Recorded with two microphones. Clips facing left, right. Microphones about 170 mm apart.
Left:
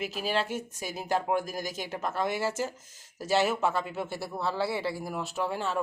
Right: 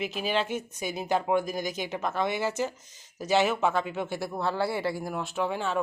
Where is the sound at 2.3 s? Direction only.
40° left (ahead or behind).